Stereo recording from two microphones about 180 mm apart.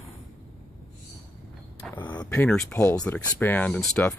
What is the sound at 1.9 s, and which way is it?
Speech, 10° left (ahead or behind).